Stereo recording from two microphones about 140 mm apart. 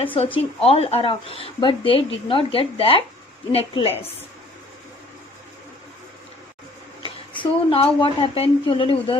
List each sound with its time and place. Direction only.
0.0 s a woman's voice: 40° left (ahead or behind)
7.0 s speech: 40° left (ahead or behind)